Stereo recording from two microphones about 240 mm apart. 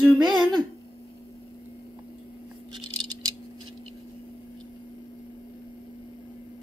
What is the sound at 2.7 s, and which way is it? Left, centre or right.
Rattle, centre.